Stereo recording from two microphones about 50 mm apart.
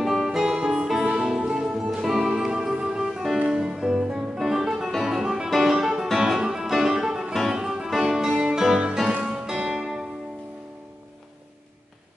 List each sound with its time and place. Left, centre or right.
0.0 s music: centre
7.1 s music: centre